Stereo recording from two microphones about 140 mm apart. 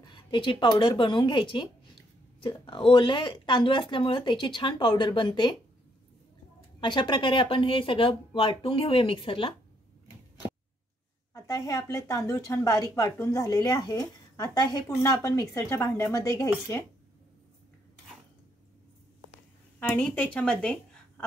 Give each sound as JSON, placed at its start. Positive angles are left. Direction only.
{"t": 0.0, "sound": "speech", "side_deg": 35}
{"t": 6.8, "sound": "speech", "side_deg": 35}
{"t": 11.3, "sound": "a woman's voice", "side_deg": 25}
{"t": 19.8, "sound": "speech", "side_deg": 10}